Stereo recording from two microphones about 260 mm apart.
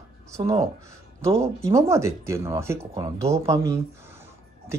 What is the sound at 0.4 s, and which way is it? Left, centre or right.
Speech, right.